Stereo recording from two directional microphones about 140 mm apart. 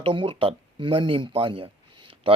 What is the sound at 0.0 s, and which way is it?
Speech, 35° right (ahead or behind).